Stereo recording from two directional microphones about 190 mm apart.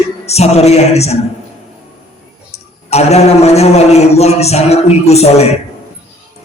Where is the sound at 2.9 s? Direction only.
35° left (ahead or behind).